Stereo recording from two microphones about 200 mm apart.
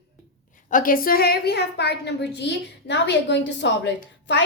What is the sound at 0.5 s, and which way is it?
A woman's voice, 40° left (ahead or behind).